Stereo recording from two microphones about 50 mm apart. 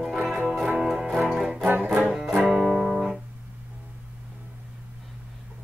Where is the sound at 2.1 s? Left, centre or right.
Centre.